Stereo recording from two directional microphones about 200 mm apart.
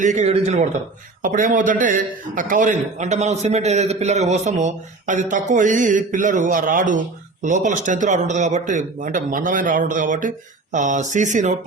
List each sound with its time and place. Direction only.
0.0 s a man's voice: 35° right (ahead or behind)